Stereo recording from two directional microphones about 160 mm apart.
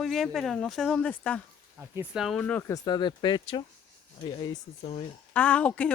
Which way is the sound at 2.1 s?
Centre (ahead or behind).